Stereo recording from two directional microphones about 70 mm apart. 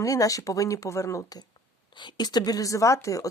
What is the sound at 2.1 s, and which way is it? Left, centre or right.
Speech, left.